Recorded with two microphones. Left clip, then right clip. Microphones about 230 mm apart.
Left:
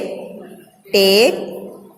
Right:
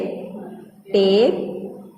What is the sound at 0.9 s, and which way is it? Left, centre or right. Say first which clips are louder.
Speech: left 4 dB; left.